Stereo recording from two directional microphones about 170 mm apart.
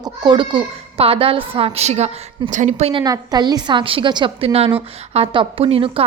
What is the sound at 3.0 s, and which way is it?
A woman's voice, 20° right (ahead or behind).